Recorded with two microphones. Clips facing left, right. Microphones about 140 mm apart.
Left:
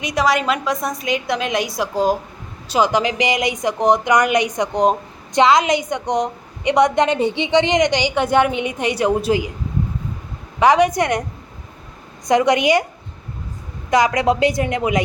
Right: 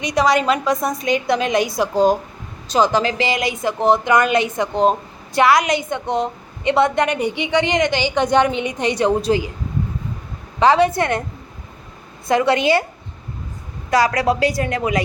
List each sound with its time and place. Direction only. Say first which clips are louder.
0.0 s a woman's voice: right 2 dB; centre (ahead or behind)
10.6 s speech: even; 15° left (ahead or behind)
12.3 s speech: left 1 dB; 20° left (ahead or behind)
13.9 s a woman's voice: left 1 dB; 20° left (ahead or behind)